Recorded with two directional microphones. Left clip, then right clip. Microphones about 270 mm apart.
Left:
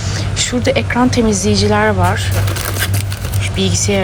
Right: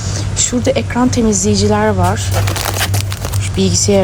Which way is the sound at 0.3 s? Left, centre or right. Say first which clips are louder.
Even; centre.